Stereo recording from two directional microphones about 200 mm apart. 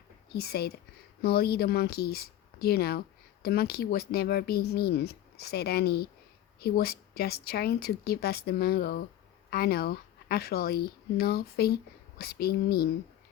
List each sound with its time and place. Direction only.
0.3 s speech: 50° left (ahead or behind)